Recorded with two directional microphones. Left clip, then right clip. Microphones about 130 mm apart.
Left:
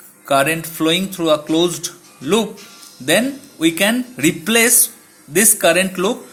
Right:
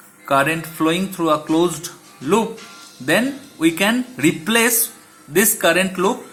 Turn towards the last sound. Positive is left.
turn(degrees=15)  # may be behind; listen again after turning